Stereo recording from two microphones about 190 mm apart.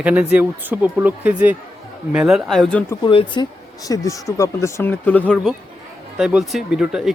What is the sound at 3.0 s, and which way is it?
Speech, 25° left (ahead or behind).